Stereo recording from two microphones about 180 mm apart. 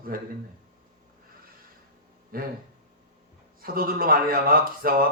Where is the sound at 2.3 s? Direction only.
55° right (ahead or behind).